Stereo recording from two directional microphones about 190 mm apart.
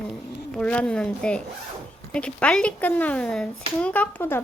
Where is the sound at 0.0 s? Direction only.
5° left (ahead or behind).